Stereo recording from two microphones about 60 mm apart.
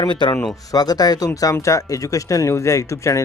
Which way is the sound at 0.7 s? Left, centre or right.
Left.